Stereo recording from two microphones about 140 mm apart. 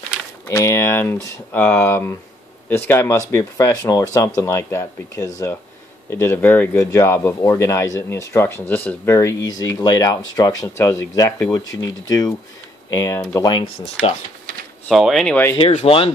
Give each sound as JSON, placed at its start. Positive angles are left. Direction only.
{"t": 0.5, "sound": "speech", "side_deg": 20}
{"t": 14.9, "sound": "speech", "side_deg": 0}
{"t": 15.7, "sound": "speech", "side_deg": 45}